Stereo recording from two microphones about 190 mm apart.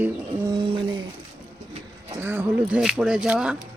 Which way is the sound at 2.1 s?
10° right (ahead or behind).